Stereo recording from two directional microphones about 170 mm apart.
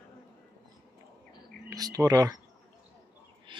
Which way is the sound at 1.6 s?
20° right (ahead or behind).